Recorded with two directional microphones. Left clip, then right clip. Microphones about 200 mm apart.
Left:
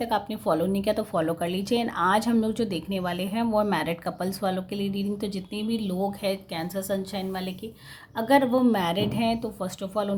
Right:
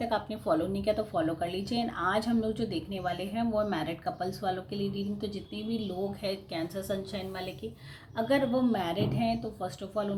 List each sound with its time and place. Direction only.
0.0 s a woman's voice: 35° left (ahead or behind)